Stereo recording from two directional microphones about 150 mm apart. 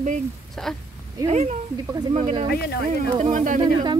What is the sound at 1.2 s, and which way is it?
Speech, 50° right (ahead or behind).